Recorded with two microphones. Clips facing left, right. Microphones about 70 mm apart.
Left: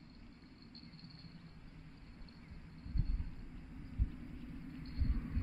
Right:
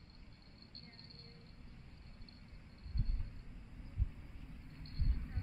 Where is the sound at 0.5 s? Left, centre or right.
Right.